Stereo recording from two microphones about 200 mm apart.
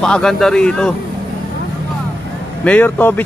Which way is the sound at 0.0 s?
5° left (ahead or behind).